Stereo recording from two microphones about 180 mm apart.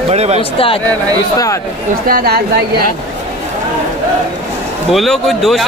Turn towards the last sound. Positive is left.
turn(degrees=0)  # may be behind; listen again after turning